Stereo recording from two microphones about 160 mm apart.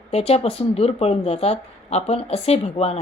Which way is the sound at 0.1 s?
40° left (ahead or behind).